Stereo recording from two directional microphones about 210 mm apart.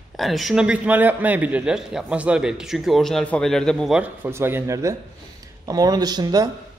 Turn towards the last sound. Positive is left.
turn(degrees=-20)  # may be behind; listen again after turning